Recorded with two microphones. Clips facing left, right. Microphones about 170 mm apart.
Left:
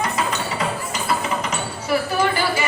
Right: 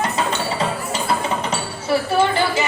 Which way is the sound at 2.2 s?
25° right (ahead or behind).